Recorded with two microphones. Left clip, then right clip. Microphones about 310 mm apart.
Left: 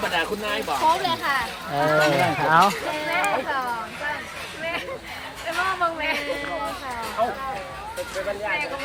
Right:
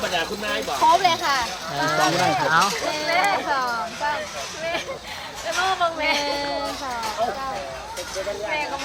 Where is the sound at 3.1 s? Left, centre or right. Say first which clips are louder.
Right 3 dB; right.